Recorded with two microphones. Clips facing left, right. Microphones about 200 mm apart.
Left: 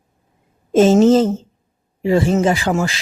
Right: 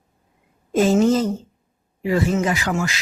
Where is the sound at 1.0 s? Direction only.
25° left (ahead or behind).